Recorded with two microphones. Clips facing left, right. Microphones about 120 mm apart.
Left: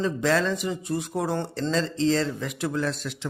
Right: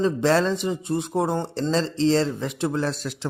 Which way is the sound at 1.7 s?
30° right (ahead or behind).